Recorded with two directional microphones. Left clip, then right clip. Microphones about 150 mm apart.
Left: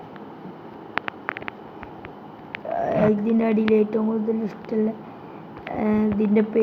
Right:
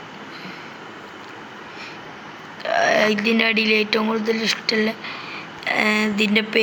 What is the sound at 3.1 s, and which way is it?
Speech, 20° right (ahead or behind).